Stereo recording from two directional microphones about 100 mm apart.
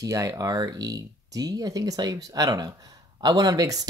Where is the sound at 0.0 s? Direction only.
35° right (ahead or behind).